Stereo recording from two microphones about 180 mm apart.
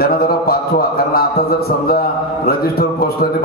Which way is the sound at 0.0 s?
55° left (ahead or behind).